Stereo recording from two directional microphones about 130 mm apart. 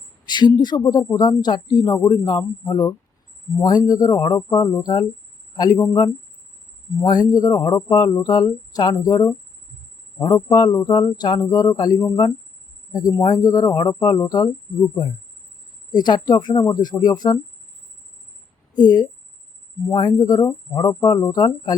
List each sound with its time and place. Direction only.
0.3 s speech: 35° left (ahead or behind)
7.0 s speech: 30° left (ahead or behind)
18.8 s speech: 35° left (ahead or behind)